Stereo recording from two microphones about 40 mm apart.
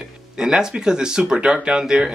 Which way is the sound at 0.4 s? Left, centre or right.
Centre.